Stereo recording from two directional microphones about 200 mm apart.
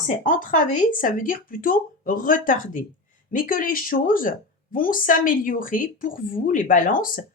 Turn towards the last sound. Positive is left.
turn(degrees=45)  # may be behind; listen again after turning